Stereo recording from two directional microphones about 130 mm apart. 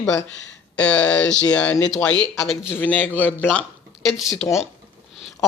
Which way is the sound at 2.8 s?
15° left (ahead or behind).